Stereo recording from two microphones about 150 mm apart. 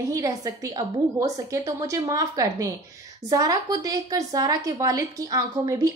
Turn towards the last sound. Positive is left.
turn(degrees=-20)  # may be behind; listen again after turning